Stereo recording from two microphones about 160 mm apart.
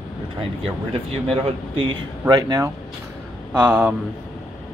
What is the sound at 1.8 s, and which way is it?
Speech, 25° right (ahead or behind).